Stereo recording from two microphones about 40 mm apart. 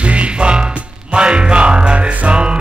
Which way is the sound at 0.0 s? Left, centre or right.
Right.